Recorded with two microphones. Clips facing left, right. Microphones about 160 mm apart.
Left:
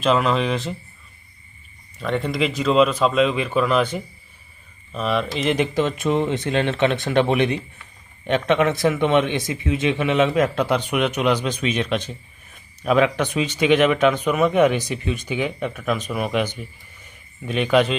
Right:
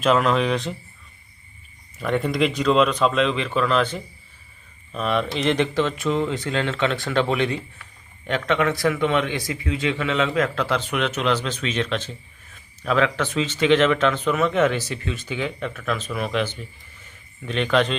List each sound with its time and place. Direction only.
0.0 s speech: centre (ahead or behind)
2.0 s a man's voice: 5° right (ahead or behind)